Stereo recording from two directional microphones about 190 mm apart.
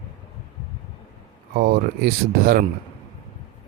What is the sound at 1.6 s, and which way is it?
Speech, 50° right (ahead or behind).